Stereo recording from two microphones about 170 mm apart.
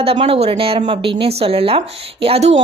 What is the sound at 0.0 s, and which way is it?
A woman's voice, 35° right (ahead or behind).